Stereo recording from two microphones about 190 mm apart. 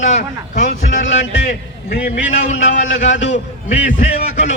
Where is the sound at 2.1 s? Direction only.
40° left (ahead or behind).